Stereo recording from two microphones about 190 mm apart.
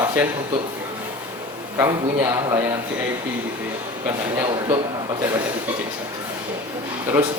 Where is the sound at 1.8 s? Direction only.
15° right (ahead or behind).